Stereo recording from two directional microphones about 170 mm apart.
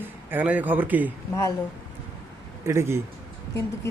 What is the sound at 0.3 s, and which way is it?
Speech, 10° right (ahead or behind).